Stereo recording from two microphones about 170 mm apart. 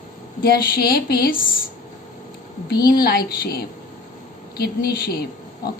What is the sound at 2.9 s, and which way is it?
A woman's voice, 60° left (ahead or behind).